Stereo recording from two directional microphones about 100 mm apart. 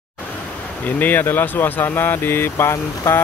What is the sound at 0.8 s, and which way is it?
Speech, 20° left (ahead or behind).